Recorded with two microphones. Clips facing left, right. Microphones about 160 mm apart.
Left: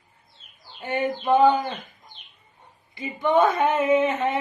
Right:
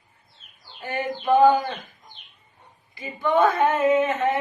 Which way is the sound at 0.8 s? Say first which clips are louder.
Left 3 dB; 25° left (ahead or behind).